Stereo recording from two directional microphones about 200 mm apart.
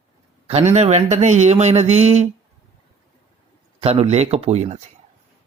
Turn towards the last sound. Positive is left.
turn(degrees=-35)  # may be behind; listen again after turning